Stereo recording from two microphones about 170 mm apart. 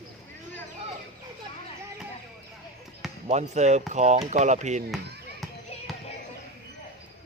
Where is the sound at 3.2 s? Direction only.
40° right (ahead or behind).